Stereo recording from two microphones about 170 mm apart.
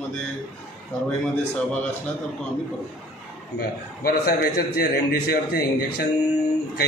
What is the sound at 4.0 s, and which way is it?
A man's voice, 60° left (ahead or behind).